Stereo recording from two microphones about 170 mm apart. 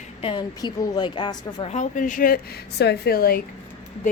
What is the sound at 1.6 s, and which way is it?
A woman's voice, 45° left (ahead or behind).